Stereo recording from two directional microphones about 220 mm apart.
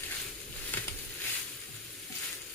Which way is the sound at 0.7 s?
5° left (ahead or behind).